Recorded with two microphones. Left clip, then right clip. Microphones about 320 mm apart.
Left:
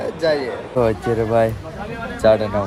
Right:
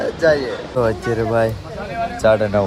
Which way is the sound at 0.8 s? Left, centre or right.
Right.